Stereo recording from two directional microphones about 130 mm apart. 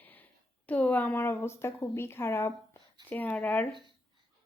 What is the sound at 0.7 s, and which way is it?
A woman's voice, 10° left (ahead or behind).